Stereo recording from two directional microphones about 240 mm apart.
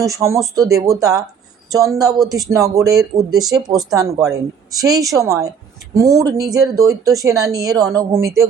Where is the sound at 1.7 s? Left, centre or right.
Centre.